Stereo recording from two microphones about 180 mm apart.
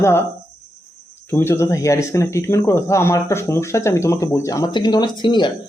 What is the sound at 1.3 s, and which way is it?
Speech, 15° left (ahead or behind).